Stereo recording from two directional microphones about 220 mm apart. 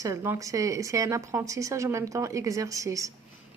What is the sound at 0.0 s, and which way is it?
A woman's voice, 15° right (ahead or behind).